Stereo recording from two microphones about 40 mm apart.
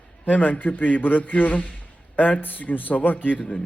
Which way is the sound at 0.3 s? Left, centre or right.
Left.